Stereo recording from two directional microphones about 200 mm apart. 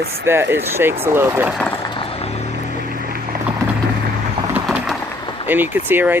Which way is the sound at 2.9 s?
45° right (ahead or behind).